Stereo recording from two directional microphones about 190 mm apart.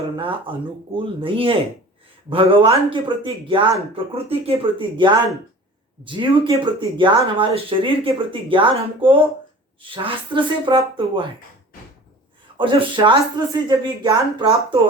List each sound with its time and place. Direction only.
0.2 s speech: 25° right (ahead or behind)
12.5 s speech: 25° right (ahead or behind)